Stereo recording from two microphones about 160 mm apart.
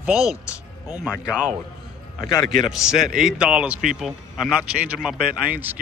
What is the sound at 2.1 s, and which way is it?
Speech, 20° left (ahead or behind).